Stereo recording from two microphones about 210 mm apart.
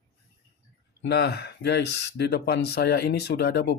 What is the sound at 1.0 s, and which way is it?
Speech, 50° left (ahead or behind).